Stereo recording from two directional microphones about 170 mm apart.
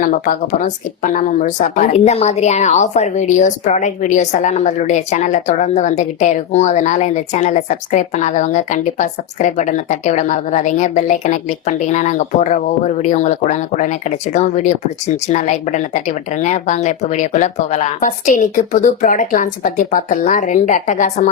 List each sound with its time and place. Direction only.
0.0 s a woman's voice: 55° left (ahead or behind)